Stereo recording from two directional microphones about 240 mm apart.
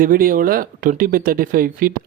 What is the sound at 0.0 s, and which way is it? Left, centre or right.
Speech, right.